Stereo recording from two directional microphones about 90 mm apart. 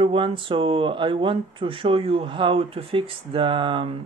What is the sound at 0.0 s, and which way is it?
Speech, 80° right.